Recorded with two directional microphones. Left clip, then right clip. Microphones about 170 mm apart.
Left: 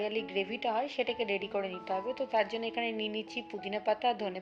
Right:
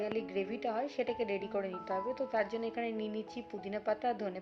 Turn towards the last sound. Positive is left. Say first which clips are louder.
# left 4 dB
turn(degrees=15)  # may be behind; listen again after turning